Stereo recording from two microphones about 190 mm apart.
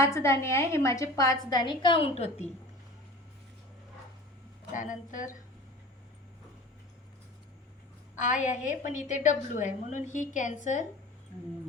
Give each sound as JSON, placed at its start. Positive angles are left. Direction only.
{"t": 0.0, "sound": "a woman's voice", "side_deg": 15}
{"t": 4.7, "sound": "speech", "side_deg": 40}
{"t": 8.1, "sound": "a woman's voice", "side_deg": 40}